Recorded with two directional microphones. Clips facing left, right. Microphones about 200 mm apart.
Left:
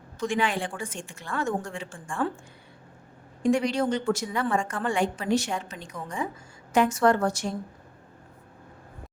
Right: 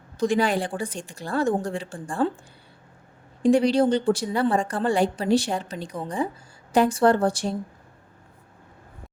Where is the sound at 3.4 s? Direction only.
35° right (ahead or behind).